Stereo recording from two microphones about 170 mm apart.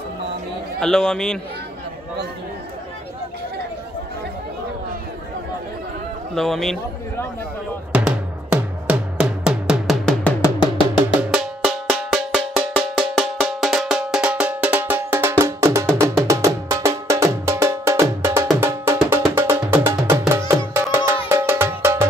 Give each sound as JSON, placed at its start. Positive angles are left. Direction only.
{"t": 0.7, "sound": "a man's voice", "side_deg": 5}
{"t": 6.3, "sound": "a man's voice", "side_deg": 0}
{"t": 7.9, "sound": "music", "side_deg": -5}